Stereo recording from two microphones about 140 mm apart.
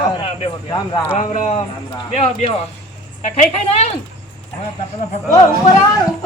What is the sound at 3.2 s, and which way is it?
Speech, 50° left (ahead or behind).